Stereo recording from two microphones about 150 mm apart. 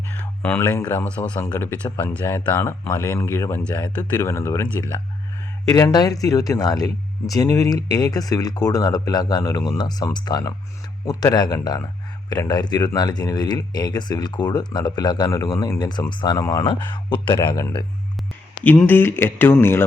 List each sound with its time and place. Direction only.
0.2 s a sound: 10° left (ahead or behind)
0.9 s speech: 10° left (ahead or behind); by 17.5 s 30° left (ahead or behind)
18.6 s speech: 10° left (ahead or behind)